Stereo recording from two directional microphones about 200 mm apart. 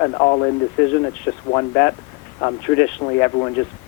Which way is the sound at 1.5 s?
20° left (ahead or behind).